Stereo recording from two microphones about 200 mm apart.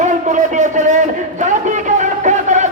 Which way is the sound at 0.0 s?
35° right (ahead or behind).